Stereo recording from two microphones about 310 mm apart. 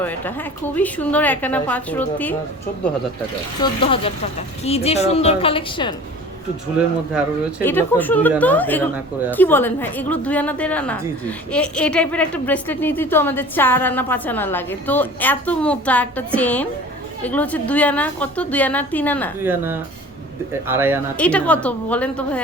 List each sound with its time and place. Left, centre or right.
0.0 s a woman's voice: centre
3.6 s speech: centre
7.1 s a woman's voice: centre
19.4 s speech: centre
21.2 s a woman's voice: centre